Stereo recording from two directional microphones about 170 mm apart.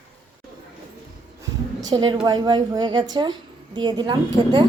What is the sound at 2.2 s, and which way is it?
Speech, 25° right (ahead or behind).